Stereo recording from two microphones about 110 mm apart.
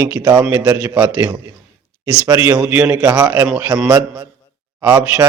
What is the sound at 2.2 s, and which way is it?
Speech, 30° right (ahead or behind).